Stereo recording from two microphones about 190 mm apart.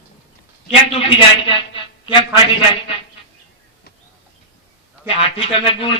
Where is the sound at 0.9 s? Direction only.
30° left (ahead or behind).